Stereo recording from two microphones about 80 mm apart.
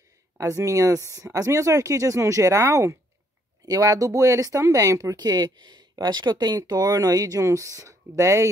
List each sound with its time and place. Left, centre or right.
0.4 s speech: right